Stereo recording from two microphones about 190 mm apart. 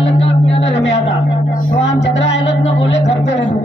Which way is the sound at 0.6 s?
70° left (ahead or behind).